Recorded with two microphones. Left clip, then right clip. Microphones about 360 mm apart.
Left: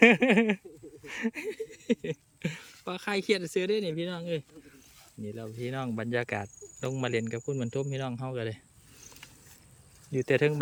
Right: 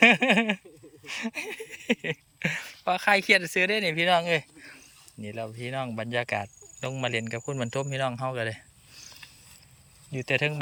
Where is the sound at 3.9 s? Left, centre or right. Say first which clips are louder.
Right 11 dB; centre.